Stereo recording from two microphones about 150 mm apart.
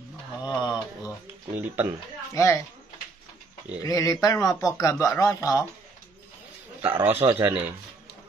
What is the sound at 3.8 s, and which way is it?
Speech, 25° left (ahead or behind).